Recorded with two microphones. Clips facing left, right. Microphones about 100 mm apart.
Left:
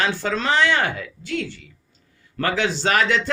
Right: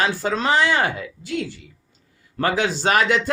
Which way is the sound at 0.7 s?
35° right (ahead or behind).